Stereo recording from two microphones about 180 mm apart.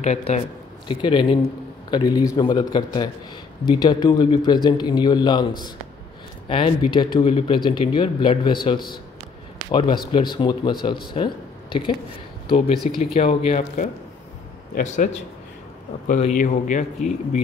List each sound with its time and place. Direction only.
0.0 s speech: 40° left (ahead or behind)
0.8 s speech: 25° left (ahead or behind)
6.5 s speech: 25° left (ahead or behind)
11.1 s a sound: 25° left (ahead or behind)
12.4 s speech: 35° left (ahead or behind)
14.8 s speech: 45° left (ahead or behind)
16.1 s speech: 45° left (ahead or behind)